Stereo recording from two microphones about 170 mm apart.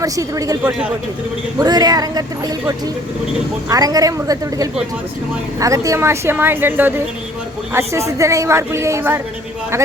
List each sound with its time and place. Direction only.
0.0 s speech: 20° right (ahead or behind)